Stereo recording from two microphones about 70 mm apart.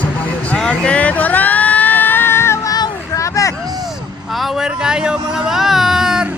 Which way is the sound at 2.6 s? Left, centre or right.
Left.